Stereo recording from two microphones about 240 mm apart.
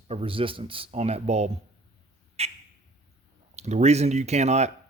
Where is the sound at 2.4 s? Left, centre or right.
Right.